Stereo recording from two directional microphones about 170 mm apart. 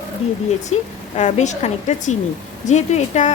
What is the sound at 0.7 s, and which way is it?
A woman's voice, 45° left (ahead or behind).